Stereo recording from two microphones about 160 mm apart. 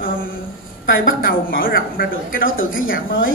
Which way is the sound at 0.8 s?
65° left (ahead or behind).